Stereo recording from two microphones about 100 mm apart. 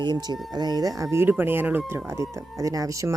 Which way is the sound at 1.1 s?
20° right (ahead or behind).